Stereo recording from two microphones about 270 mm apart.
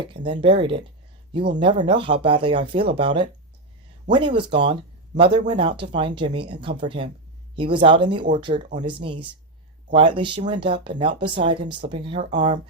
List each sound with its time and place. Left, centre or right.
0.0 s speech: centre